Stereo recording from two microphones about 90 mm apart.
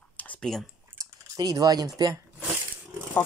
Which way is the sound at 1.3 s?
45° right (ahead or behind).